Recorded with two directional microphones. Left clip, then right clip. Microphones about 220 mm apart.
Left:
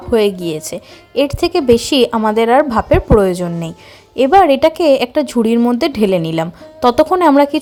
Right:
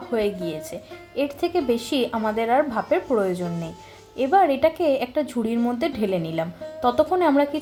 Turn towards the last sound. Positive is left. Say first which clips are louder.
# left 9 dB
turn(degrees=45)  # may be behind; listen again after turning